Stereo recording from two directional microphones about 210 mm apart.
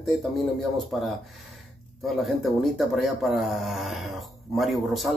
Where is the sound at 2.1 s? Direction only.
Centre (ahead or behind).